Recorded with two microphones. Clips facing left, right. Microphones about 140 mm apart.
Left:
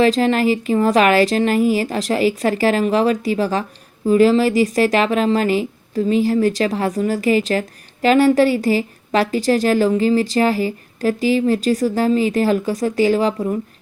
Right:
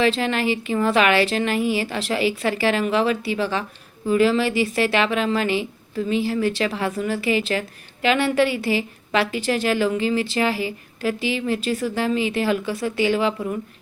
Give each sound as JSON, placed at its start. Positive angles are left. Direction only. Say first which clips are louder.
{"t": 0.0, "sound": "speech", "louder": "left 6 dB", "side_deg": 40}